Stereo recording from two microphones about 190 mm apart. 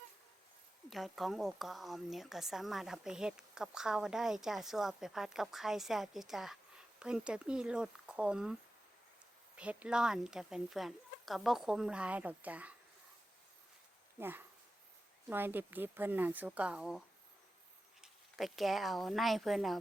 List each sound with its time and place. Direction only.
0.9 s a woman's voice: centre (ahead or behind)
9.6 s a woman's voice: 5° right (ahead or behind)
14.2 s speech: 10° right (ahead or behind)
18.0 s speech: centre (ahead or behind)